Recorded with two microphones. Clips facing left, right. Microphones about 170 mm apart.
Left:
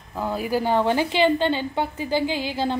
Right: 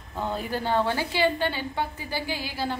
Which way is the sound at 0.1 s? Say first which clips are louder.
Left 5 dB; 5° left (ahead or behind).